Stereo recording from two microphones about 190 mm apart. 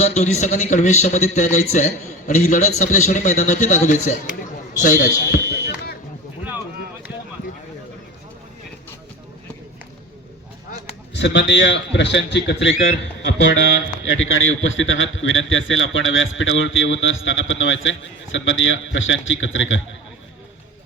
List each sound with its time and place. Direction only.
0.0 s a man's voice: 35° left (ahead or behind)
11.1 s a man's voice: 65° left (ahead or behind)
14.0 s a man's voice: 90° left